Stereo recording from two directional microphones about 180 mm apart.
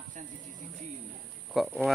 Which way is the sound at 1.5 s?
Centre (ahead or behind).